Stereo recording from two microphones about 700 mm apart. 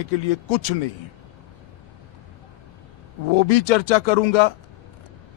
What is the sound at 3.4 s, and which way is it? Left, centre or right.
A man's voice, left.